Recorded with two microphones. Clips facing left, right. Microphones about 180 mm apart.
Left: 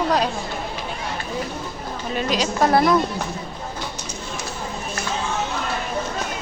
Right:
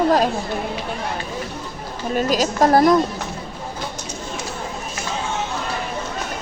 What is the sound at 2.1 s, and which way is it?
Speech, 45° right (ahead or behind).